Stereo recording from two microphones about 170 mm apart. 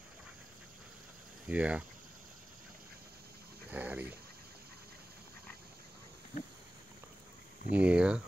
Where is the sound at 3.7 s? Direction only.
10° right (ahead or behind).